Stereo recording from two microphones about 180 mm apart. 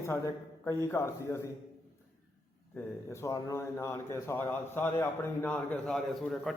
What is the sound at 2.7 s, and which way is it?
A man's voice, 15° left (ahead or behind).